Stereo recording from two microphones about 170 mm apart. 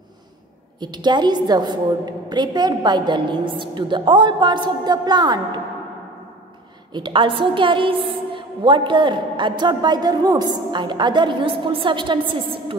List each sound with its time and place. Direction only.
0.7 s a woman's voice: 25° right (ahead or behind)
6.9 s a woman's voice: 25° right (ahead or behind)